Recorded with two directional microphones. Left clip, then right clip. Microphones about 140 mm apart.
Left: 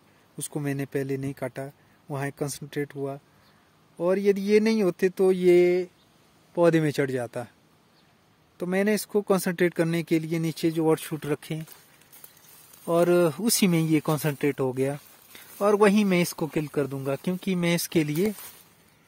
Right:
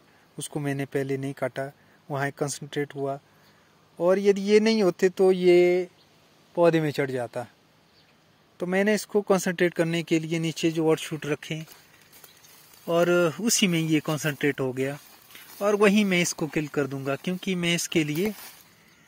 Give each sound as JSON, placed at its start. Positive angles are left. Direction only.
{"t": 0.4, "sound": "speech", "side_deg": 35}
{"t": 5.3, "sound": "speech", "side_deg": 40}
{"t": 6.5, "sound": "speech", "side_deg": 60}
{"t": 8.5, "sound": "speech", "side_deg": 30}
{"t": 12.8, "sound": "speech", "side_deg": 35}
{"t": 15.3, "sound": "speech", "side_deg": 50}